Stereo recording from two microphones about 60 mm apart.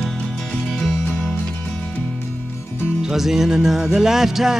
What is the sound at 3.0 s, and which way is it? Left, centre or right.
Music, centre.